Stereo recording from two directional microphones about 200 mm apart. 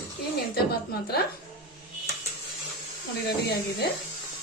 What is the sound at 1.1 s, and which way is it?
Speech, 50° left (ahead or behind).